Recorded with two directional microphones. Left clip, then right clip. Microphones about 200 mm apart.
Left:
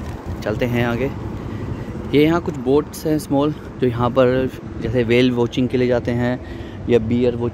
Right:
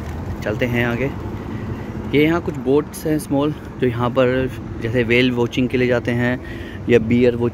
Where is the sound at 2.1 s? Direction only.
15° left (ahead or behind).